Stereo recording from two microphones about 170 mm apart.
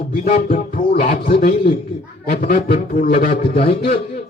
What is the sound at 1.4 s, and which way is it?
A man's voice, 60° left (ahead or behind).